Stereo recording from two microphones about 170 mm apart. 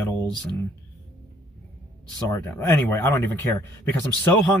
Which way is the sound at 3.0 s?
15° left (ahead or behind).